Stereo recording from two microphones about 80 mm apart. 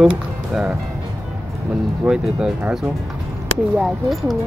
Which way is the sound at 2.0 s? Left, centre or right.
Centre.